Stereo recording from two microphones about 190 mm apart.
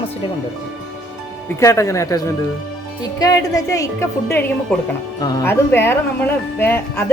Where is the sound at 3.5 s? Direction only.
20° left (ahead or behind).